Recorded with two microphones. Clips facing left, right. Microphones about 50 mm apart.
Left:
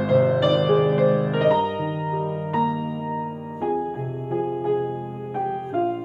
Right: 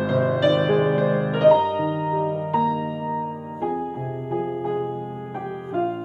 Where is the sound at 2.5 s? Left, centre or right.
Left.